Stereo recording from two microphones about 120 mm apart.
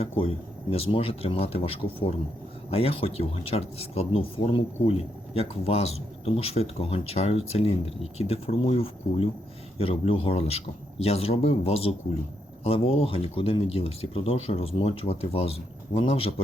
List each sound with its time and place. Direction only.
0.0 s speech: 50° left (ahead or behind)